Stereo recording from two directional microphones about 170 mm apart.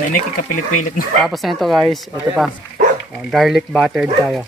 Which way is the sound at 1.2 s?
Centre (ahead or behind).